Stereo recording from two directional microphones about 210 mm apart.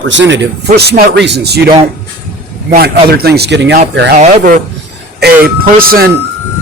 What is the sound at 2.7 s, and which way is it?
Speech, 45° right (ahead or behind).